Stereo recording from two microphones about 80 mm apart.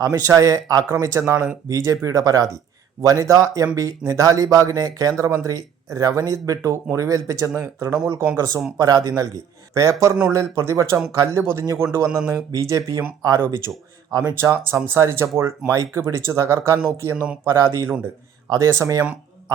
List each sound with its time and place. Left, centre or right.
0.0 s speech: right
8.8 s speech: right
14.1 s speech: right
18.4 s speech: right